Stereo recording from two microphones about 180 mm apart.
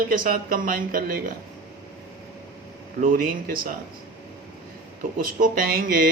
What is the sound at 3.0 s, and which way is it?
Speech, 50° right (ahead or behind).